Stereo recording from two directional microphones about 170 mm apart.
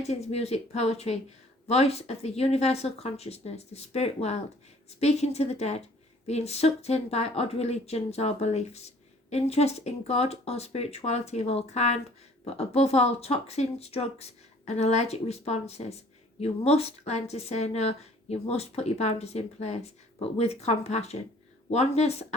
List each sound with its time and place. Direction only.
0.1 s speech: 40° left (ahead or behind)